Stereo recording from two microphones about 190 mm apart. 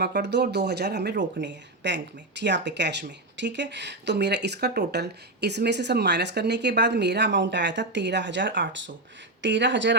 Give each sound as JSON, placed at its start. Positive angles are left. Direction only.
{"t": 0.0, "sound": "speech", "side_deg": -60}